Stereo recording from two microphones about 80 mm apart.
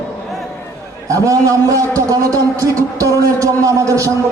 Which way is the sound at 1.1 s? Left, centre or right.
Right.